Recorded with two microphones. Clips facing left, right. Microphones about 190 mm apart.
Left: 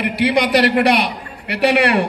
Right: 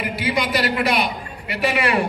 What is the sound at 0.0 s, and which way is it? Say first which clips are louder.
A man's voice: left 6 dB; 70° left (ahead or behind).